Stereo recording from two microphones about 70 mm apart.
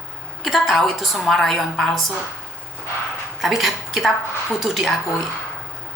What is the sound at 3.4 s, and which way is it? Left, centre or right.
A woman's voice, centre.